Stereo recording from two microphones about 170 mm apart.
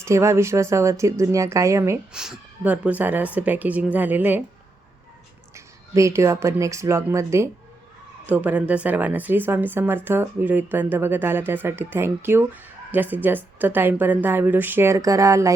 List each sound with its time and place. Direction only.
0.0 s speech: 15° right (ahead or behind)
2.1 s speech: 5° right (ahead or behind)
5.5 s speech: 15° right (ahead or behind)